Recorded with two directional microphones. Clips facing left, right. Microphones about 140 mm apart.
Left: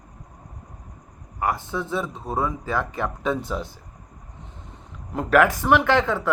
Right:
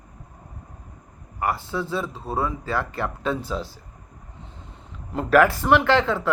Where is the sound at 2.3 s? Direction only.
15° left (ahead or behind).